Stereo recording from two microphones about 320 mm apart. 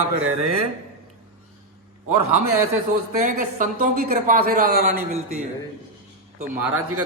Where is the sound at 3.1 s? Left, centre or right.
Right.